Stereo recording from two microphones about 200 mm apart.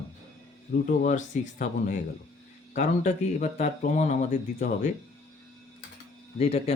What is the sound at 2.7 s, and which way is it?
A man's voice, 35° left (ahead or behind).